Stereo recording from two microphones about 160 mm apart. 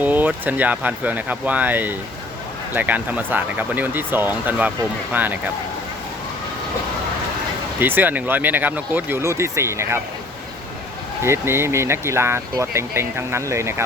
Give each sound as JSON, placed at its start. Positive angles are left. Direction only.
{"t": 0.0, "sound": "speech", "side_deg": -10}
{"t": 7.8, "sound": "speech", "side_deg": -10}
{"t": 11.2, "sound": "speech", "side_deg": -15}